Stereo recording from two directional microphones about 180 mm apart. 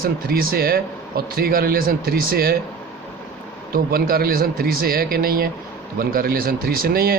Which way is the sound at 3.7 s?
55° right (ahead or behind).